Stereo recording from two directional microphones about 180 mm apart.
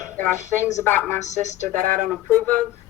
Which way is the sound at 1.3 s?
40° left (ahead or behind).